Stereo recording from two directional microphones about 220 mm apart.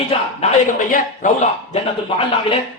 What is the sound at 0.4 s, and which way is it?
A man's voice, 30° left (ahead or behind).